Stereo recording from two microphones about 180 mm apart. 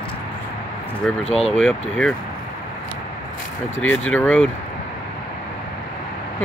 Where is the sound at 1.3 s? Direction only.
35° left (ahead or behind).